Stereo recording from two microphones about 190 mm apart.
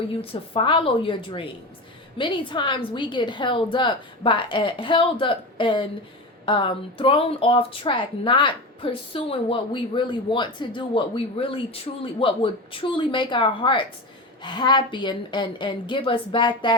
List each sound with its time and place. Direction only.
0.1 s speech: 30° left (ahead or behind)